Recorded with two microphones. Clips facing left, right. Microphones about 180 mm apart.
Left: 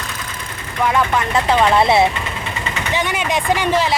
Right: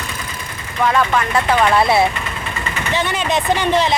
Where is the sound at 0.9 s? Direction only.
15° left (ahead or behind).